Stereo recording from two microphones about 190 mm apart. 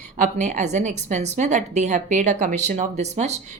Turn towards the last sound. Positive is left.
turn(degrees=-35)  # may be behind; listen again after turning